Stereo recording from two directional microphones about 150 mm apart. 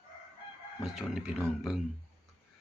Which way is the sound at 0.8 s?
5° right (ahead or behind).